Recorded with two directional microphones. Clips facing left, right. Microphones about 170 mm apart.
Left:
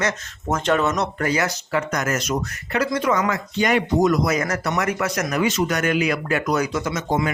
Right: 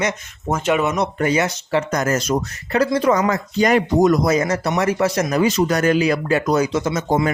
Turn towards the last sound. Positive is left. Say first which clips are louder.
# right 4 dB
turn(degrees=-30)  # may be behind; listen again after turning